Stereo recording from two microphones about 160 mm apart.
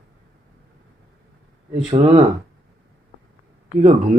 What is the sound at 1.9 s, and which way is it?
Speech, 35° right (ahead or behind).